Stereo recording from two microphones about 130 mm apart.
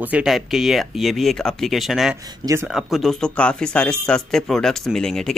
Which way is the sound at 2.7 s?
Centre (ahead or behind).